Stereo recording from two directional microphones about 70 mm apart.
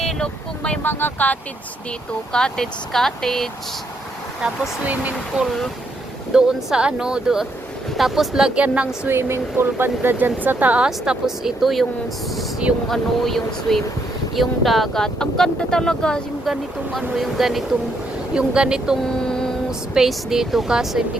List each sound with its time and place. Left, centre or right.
0.0 s vehicle: centre
0.8 s speech: left
2.3 s speech: centre
5.4 s speech: centre
9.0 s speech: right
10.8 s speech: centre
12.9 s speech: centre
16.5 s speech: centre
18.3 s speech: centre
19.2 s mantra: centre
19.9 s speech: centre